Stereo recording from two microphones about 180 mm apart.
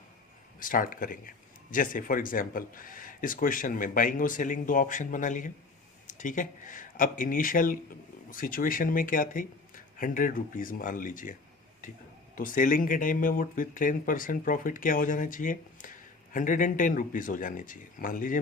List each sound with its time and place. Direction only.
0.6 s speech: 50° left (ahead or behind)
12.4 s speech: 50° left (ahead or behind)